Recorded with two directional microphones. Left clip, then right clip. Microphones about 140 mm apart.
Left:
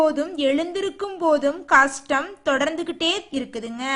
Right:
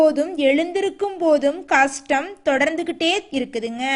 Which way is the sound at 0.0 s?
20° right (ahead or behind).